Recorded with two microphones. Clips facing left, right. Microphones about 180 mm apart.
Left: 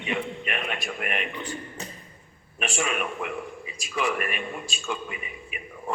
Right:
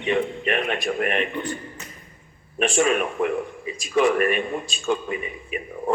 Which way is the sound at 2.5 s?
40° right (ahead or behind).